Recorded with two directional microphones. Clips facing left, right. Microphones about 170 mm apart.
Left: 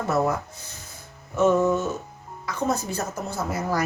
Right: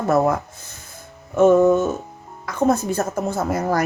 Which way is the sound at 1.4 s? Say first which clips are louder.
Right 6 dB; 50° right (ahead or behind).